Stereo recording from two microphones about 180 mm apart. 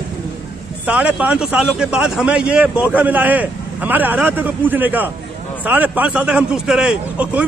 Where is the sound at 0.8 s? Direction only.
10° right (ahead or behind).